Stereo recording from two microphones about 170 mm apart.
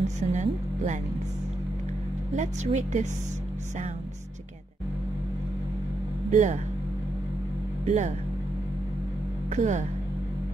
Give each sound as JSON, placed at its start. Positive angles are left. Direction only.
{"t": 0.0, "sound": "speech", "side_deg": -45}
{"t": 2.3, "sound": "speech", "side_deg": -45}
{"t": 6.3, "sound": "speech", "side_deg": -45}
{"t": 7.8, "sound": "speech", "side_deg": -45}
{"t": 9.5, "sound": "speech", "side_deg": -45}